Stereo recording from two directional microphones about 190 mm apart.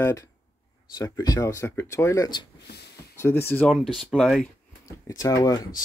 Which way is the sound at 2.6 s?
60° left (ahead or behind).